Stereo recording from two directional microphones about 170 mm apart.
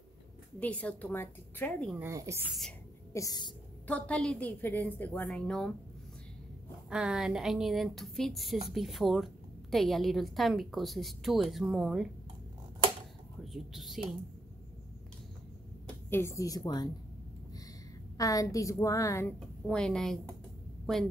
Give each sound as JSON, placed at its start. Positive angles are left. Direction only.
{"t": 0.6, "sound": "a woman's voice", "side_deg": 5}
{"t": 2.0, "sound": "speech", "side_deg": -15}
{"t": 3.1, "sound": "a woman's voice", "side_deg": 20}
{"t": 3.8, "sound": "a woman's voice", "side_deg": 10}
{"t": 6.9, "sound": "a woman's voice", "side_deg": -5}
{"t": 13.4, "sound": "speech", "side_deg": 0}
{"t": 16.1, "sound": "a woman's voice", "side_deg": 15}
{"t": 18.1, "sound": "a woman's voice", "side_deg": 20}
{"t": 19.6, "sound": "a woman's voice", "side_deg": 5}